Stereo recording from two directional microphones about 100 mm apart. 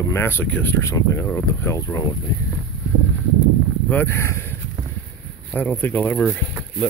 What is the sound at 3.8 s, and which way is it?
Speech, 20° left (ahead or behind).